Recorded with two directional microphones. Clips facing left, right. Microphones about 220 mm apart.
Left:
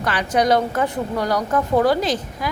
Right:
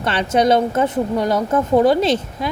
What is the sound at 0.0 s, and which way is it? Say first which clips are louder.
A woman's voice: right 3 dB; 25° right (ahead or behind).